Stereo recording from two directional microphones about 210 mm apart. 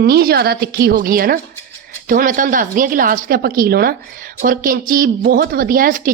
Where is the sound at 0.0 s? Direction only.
50° right (ahead or behind).